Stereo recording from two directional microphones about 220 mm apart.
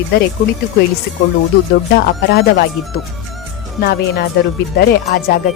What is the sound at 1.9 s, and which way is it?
A woman's voice, 45° left (ahead or behind).